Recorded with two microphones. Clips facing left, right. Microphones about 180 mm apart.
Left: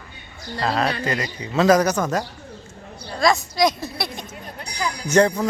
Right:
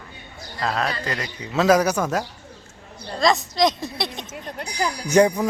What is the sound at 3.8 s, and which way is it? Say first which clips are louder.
Speech: even; 20° right (ahead or behind).